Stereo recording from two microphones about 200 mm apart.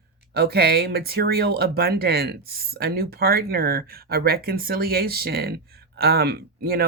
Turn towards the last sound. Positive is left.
turn(degrees=-50)  # may be behind; listen again after turning